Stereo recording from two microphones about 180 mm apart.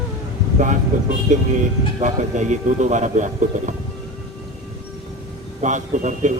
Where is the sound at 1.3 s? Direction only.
40° right (ahead or behind).